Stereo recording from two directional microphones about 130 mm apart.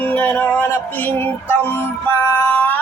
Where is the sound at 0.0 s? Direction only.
10° left (ahead or behind).